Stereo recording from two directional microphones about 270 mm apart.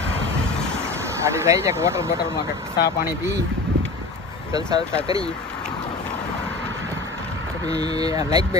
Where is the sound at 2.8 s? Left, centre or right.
Left.